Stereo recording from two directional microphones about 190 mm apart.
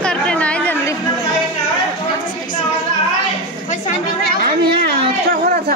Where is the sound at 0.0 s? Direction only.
5° left (ahead or behind).